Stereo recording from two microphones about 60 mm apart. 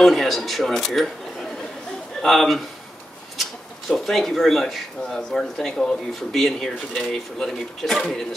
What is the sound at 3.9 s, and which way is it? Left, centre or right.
Speech, centre.